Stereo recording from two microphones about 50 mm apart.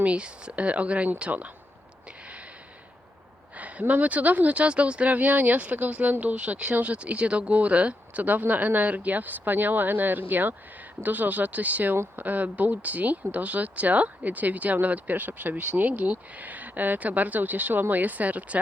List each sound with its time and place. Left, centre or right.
0.0 s speech: right
3.6 s speech: right